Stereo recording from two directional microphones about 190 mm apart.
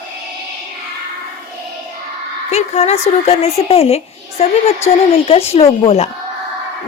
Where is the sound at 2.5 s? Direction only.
35° left (ahead or behind).